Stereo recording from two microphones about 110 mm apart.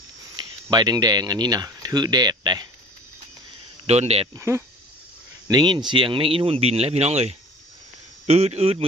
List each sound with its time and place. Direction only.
0.3 s speech: 40° right (ahead or behind)
3.8 s a man's voice: 75° right (ahead or behind)
4.4 s speech: 25° right (ahead or behind)
5.5 s a man's voice: 40° right (ahead or behind); by 8.9 s 60° right (ahead or behind)